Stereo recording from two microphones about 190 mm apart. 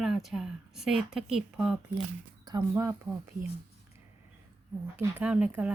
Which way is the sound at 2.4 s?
20° right (ahead or behind).